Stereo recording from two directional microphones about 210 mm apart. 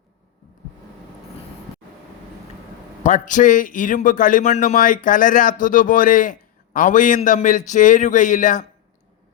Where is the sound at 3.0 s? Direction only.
40° left (ahead or behind).